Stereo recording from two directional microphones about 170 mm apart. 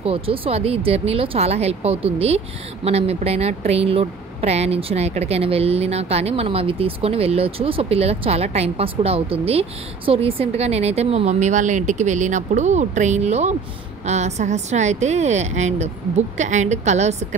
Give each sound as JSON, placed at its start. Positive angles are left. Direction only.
{"t": 0.0, "sound": "speech", "side_deg": -35}